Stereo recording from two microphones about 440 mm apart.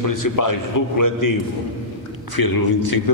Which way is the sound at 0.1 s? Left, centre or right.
Left.